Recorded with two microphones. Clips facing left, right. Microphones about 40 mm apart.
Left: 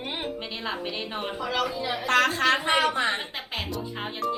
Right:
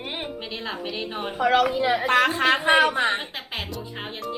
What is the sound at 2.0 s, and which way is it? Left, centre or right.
Speech, right.